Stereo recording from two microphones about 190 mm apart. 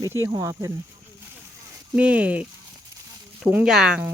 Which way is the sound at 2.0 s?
5° right (ahead or behind).